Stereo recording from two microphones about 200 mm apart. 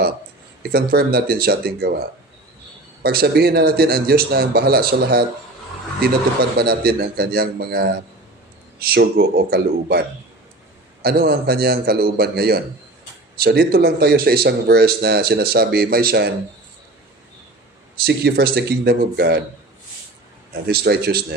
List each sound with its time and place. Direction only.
0.7 s speech: 50° right (ahead or behind)
3.0 s speech: 50° right (ahead or behind)
18.0 s speech: 55° right (ahead or behind)
20.7 s speech: 50° right (ahead or behind)